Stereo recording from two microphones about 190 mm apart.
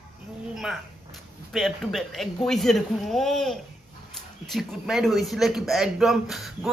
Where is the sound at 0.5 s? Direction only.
Centre (ahead or behind).